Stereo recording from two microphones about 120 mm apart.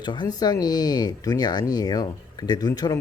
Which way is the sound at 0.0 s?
40° left (ahead or behind).